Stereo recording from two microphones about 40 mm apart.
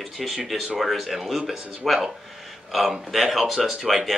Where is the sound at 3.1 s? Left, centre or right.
Centre.